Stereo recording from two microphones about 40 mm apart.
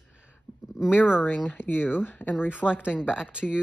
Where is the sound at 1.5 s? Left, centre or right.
Left.